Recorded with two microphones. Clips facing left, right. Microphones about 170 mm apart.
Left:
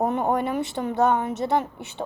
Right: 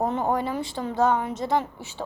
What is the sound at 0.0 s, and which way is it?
Speech, 15° left (ahead or behind).